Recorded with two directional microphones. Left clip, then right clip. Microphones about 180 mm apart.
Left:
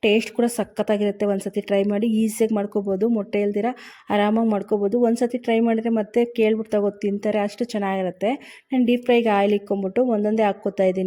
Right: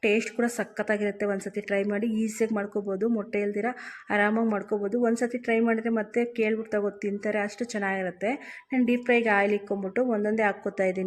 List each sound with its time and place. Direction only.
0.3 s speech: 40° left (ahead or behind)